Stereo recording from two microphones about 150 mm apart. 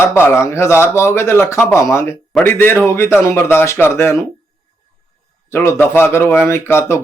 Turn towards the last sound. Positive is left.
turn(degrees=15)  # may be behind; listen again after turning